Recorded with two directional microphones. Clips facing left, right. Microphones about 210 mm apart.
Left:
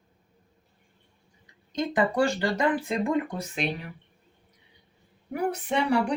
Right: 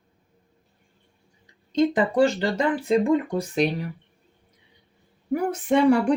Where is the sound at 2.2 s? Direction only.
25° right (ahead or behind).